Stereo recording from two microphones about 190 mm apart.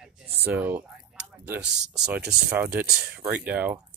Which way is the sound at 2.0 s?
5° right (ahead or behind).